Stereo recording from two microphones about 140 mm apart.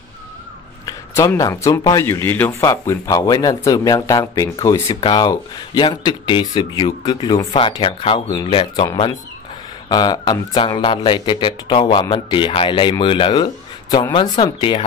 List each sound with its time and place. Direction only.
0.8 s a man's voice: 20° left (ahead or behind)
2.6 s a man's voice: 25° left (ahead or behind); by 8.2 s 40° left (ahead or behind)
8.3 s a man's voice: 30° left (ahead or behind)
9.8 s speech: 30° left (ahead or behind)
14.3 s speech: 40° left (ahead or behind)